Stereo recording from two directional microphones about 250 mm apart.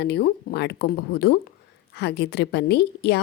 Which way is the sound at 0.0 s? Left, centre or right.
Left.